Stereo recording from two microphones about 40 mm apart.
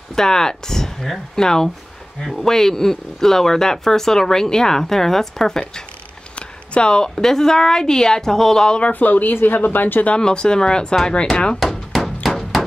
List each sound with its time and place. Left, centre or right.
0.1 s speech: centre
6.7 s speech: left
8.9 s speech: left
10.0 s speech: left
11.6 s hammer: centre
12.3 s a sound: centre